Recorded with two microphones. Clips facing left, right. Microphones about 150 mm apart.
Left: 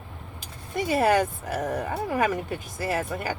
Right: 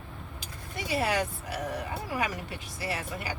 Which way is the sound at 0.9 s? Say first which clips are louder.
Left 7 dB; 50° left (ahead or behind).